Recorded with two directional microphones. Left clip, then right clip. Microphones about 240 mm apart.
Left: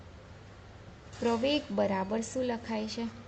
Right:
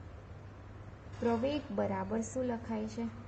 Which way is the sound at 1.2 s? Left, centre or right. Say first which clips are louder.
Left 4 dB; left.